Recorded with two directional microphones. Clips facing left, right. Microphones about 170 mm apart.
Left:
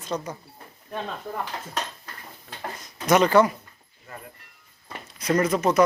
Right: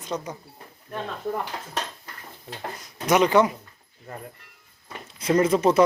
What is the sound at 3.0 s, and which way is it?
Speech, 15° right (ahead or behind).